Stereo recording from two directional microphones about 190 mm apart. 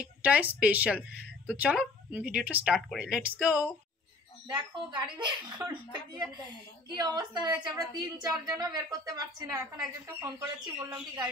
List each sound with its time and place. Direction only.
0.0 s a woman's voice: 5° right (ahead or behind)
4.5 s a woman's voice: 25° right (ahead or behind)
7.0 s a woman's voice: 20° right (ahead or behind)